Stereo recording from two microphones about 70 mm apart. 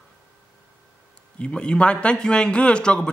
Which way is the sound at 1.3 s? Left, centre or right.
Centre.